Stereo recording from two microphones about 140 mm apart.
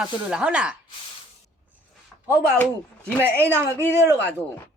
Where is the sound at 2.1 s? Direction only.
10° right (ahead or behind).